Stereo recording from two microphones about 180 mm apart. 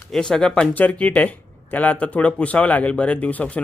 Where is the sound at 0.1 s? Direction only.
5° left (ahead or behind).